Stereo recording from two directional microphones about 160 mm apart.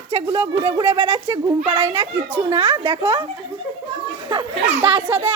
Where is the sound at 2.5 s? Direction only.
35° right (ahead or behind).